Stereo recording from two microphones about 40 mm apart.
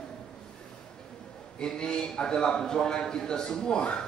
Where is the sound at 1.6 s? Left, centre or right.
Left.